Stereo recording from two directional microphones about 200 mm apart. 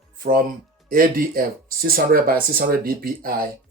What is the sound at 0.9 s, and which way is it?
Speech, 45° right (ahead or behind).